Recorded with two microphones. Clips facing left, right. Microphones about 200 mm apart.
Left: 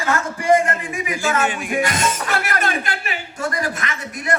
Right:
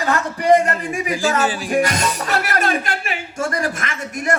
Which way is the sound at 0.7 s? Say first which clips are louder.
Right 3 dB; 35° right (ahead or behind).